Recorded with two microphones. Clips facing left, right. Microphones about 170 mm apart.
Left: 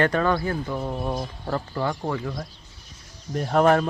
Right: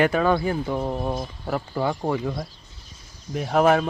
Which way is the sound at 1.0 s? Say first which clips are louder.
Right 1 dB; 5° right (ahead or behind).